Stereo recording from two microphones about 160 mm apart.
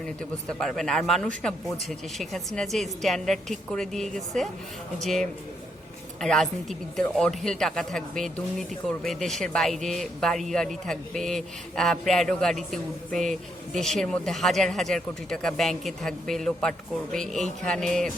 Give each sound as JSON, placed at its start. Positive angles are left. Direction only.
{"t": 0.0, "sound": "speech", "side_deg": 5}